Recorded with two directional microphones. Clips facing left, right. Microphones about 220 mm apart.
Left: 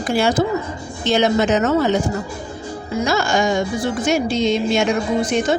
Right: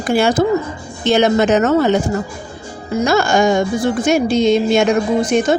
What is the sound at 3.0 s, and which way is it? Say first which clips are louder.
A man's voice: right 5 dB; 50° right (ahead or behind).